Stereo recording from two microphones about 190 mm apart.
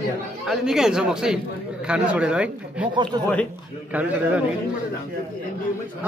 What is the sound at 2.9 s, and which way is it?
Speech, 25° right (ahead or behind).